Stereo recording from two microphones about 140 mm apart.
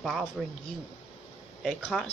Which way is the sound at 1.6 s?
Centre (ahead or behind).